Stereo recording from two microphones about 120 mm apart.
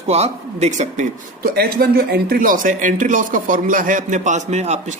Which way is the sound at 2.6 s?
90° right.